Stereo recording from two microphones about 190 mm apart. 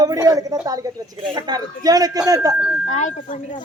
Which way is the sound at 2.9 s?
40° left (ahead or behind).